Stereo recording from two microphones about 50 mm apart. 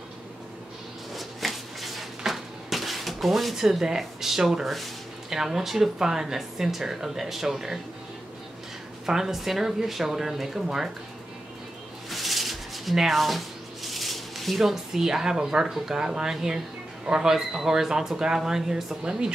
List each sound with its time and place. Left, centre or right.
1.1 s a sound: centre
5.3 s speech: centre
9.0 s speech: centre
12.1 s rub: centre
13.8 s speech: centre